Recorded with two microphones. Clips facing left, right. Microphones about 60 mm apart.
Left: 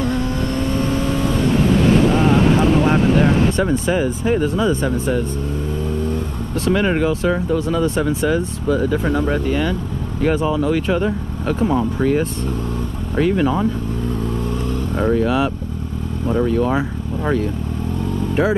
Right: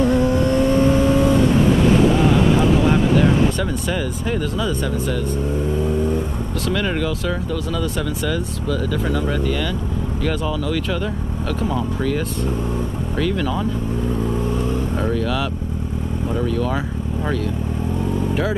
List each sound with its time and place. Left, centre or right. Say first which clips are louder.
0.0 s vehicle: right 4 dB; centre
2.8 s speech: left 1 dB; centre
5.9 s vehicle: even; centre
6.7 s speech: left 5 dB; left
15.0 s speech: left 8 dB; centre